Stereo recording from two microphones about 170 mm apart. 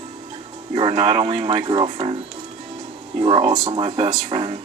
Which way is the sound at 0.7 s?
35° right (ahead or behind).